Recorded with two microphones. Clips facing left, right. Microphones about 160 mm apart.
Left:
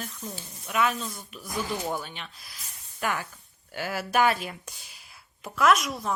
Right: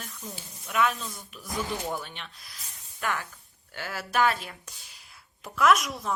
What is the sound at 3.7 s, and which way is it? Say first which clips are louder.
Speech: left 3 dB; 10° left (ahead or behind).